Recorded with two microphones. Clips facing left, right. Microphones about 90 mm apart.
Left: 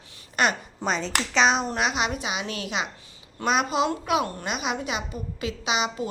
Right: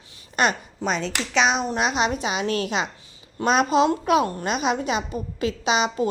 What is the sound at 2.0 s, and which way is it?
A woman's voice, 30° right (ahead or behind).